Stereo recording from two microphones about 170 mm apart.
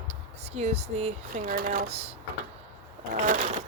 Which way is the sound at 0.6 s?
40° right (ahead or behind).